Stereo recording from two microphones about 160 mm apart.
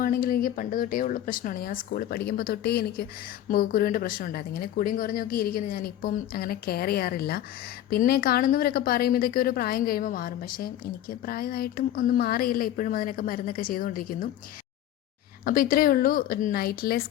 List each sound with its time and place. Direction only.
0.0 s speech: 65° left (ahead or behind); by 3.1 s 80° left
3.5 s speech: 65° left (ahead or behind)
15.4 s speech: 60° left (ahead or behind)